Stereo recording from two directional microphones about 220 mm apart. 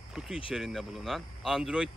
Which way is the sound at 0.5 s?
Centre (ahead or behind).